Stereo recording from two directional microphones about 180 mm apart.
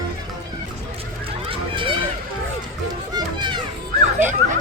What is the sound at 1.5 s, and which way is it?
Run, 30° right (ahead or behind).